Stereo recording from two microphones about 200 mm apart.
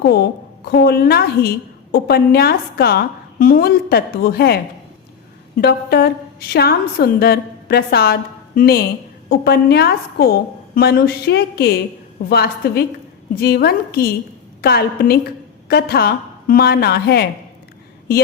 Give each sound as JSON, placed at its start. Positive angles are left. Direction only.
{"t": 0.0, "sound": "a woman's voice", "side_deg": 50}